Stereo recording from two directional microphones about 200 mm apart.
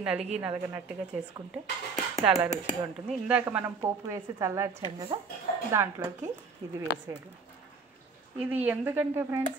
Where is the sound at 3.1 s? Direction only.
5° right (ahead or behind).